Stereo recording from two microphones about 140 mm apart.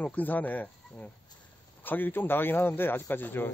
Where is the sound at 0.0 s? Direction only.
10° left (ahead or behind).